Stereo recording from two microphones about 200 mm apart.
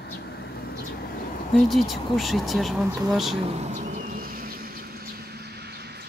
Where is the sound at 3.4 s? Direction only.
35° right (ahead or behind).